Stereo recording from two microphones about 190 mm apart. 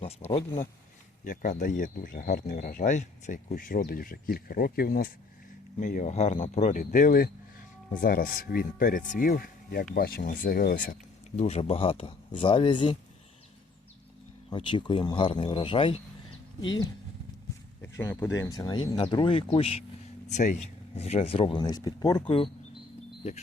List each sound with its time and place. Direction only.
0.3 s speech: 30° left (ahead or behind)
1.2 s speech: 45° left (ahead or behind)
11.3 s speech: 35° left (ahead or behind)
14.5 s speech: 25° left (ahead or behind)
17.8 s speech: 10° left (ahead or behind)
23.2 s speech: 35° left (ahead or behind)